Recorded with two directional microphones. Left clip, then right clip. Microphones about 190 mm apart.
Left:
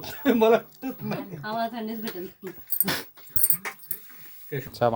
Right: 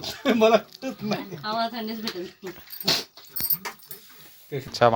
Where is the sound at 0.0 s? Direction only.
40° right (ahead or behind).